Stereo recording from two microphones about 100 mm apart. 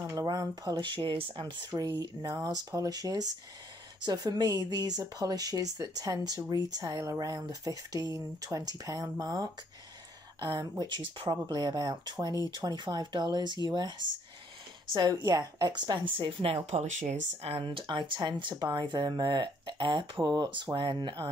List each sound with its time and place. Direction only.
0.0 s speech: 35° right (ahead or behind)
0.8 s speech: 55° right (ahead or behind); by 10.7 s 40° right (ahead or behind)
10.8 s speech: 50° right (ahead or behind)
15.0 s speech: 40° right (ahead or behind); by 16.8 s 70° right (ahead or behind)
17.4 s speech: 80° right
17.6 s speech: 50° right (ahead or behind)